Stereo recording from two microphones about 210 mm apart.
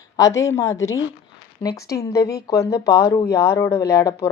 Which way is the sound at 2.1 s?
15° left (ahead or behind).